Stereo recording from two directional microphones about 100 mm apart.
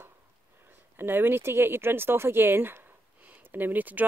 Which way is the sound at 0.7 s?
20° right (ahead or behind).